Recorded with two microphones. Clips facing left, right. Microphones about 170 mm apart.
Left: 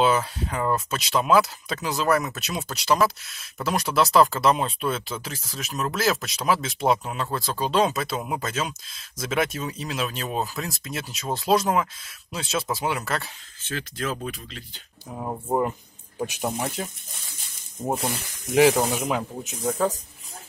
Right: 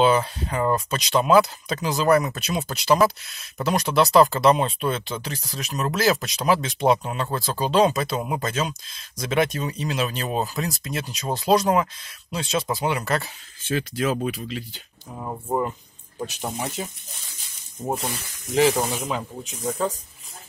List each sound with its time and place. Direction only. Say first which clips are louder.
0.0 s speech: right 2 dB; centre (ahead or behind)
13.7 s speech: right 6 dB; 10° right (ahead or behind)
15.1 s speech: left 1 dB; 10° left (ahead or behind)
18.5 s speech: left 2 dB; 10° left (ahead or behind)